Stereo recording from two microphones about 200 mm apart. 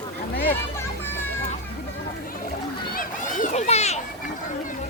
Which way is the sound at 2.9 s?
40° left (ahead or behind).